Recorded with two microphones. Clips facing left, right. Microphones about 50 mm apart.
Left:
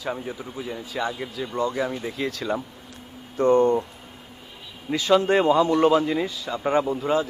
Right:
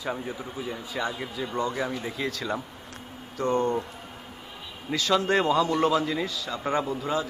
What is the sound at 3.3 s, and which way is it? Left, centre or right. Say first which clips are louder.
Speech: left 7 dB; left.